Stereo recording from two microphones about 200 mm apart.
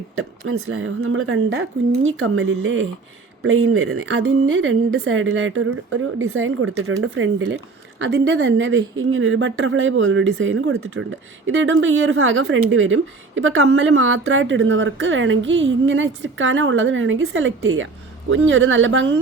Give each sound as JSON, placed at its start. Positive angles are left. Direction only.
{"t": 0.2, "sound": "a woman's voice", "side_deg": -90}
{"t": 3.9, "sound": "a woman's voice", "side_deg": -75}